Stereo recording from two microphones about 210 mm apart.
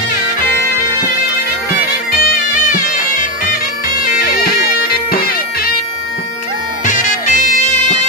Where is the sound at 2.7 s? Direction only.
40° left (ahead or behind).